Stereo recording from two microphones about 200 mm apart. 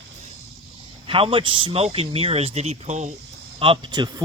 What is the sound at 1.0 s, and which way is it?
Speech, 25° right (ahead or behind).